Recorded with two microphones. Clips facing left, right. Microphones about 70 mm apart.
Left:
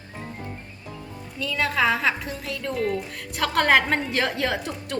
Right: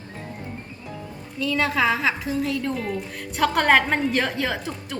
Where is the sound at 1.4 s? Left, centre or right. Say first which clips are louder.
Right 2 dB; centre.